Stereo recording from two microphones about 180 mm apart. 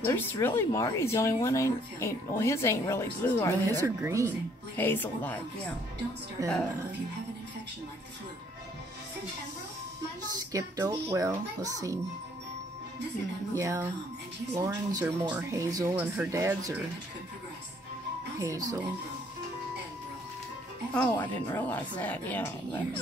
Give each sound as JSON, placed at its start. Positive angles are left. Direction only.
{"t": 0.0, "sound": "speech", "side_deg": 10}
{"t": 3.8, "sound": "speech", "side_deg": -15}
{"t": 4.7, "sound": "speech", "side_deg": 10}
{"t": 6.4, "sound": "a child's voice", "side_deg": -20}
{"t": 10.5, "sound": "a child's voice", "side_deg": -20}
{"t": 13.6, "sound": "speech", "side_deg": -15}
{"t": 18.4, "sound": "a child's voice", "side_deg": -20}
{"t": 20.9, "sound": "speech", "side_deg": 10}